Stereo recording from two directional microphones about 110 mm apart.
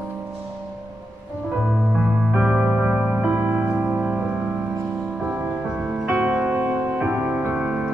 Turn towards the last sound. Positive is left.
turn(degrees=-10)  # may be behind; listen again after turning